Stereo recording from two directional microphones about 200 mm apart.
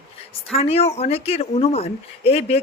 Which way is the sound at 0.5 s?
30° left (ahead or behind).